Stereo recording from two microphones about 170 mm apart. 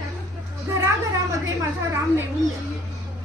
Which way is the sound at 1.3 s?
20° right (ahead or behind).